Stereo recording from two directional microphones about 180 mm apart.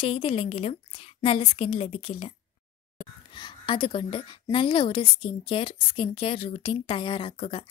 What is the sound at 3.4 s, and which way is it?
A woman's voice, 25° left (ahead or behind).